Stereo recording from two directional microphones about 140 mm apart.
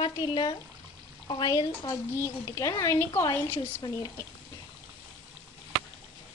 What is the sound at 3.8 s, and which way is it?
Speech, 30° left (ahead or behind).